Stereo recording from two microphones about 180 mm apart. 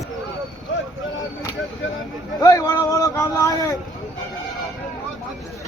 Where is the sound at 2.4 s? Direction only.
20° left (ahead or behind).